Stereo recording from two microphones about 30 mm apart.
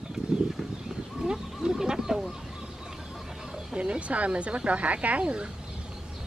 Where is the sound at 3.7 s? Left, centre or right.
Right.